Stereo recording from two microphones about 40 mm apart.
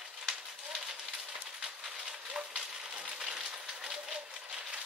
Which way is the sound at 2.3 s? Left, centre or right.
Right.